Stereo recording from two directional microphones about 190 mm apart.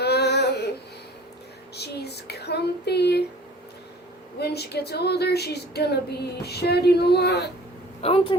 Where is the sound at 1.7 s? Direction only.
60° left (ahead or behind).